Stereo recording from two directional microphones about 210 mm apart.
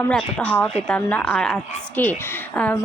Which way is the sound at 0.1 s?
5° left (ahead or behind).